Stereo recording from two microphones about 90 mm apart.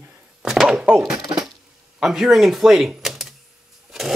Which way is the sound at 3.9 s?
5° right (ahead or behind).